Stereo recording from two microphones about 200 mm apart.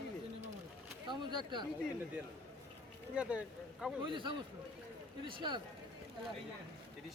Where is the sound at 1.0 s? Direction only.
20° right (ahead or behind).